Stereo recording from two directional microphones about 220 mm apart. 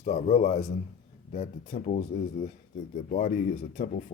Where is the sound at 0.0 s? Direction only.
30° left (ahead or behind).